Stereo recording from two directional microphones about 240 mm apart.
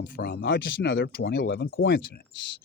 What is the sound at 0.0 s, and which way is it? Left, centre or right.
Speech, left.